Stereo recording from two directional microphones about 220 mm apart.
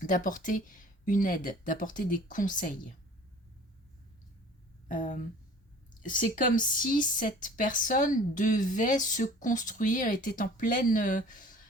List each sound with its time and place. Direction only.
0.1 s speech: 35° left (ahead or behind)
4.9 s speech: 35° left (ahead or behind)